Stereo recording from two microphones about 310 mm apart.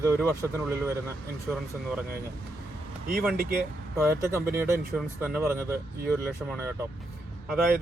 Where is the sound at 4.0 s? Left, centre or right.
Centre.